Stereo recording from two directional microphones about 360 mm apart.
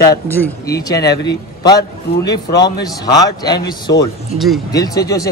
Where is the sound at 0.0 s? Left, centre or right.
Centre.